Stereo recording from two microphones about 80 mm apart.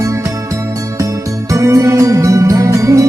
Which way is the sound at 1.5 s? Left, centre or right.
Right.